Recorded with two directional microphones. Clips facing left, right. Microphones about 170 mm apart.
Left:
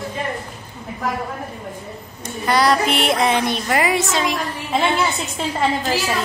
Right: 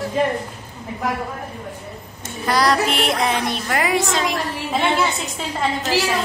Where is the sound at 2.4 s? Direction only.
Centre (ahead or behind).